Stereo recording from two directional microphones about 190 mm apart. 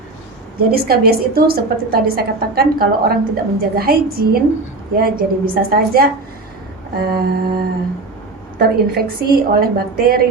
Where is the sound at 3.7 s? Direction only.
50° right (ahead or behind).